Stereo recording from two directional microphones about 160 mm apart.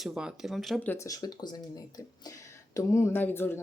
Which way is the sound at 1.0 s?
25° left (ahead or behind).